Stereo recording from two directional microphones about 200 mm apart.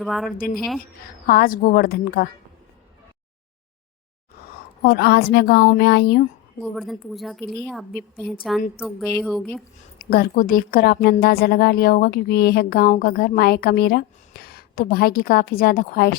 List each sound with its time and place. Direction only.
0.0 s a woman's voice: centre (ahead or behind)
0.3 s a woman's voice: 45° left (ahead or behind)
0.5 s a woman's voice: centre (ahead or behind)
1.3 s a woman's voice: 45° left (ahead or behind)
4.8 s a woman's voice: 50° left (ahead or behind)
6.6 s a woman's voice: centre (ahead or behind)
10.0 s a woman's voice: 50° left (ahead or behind)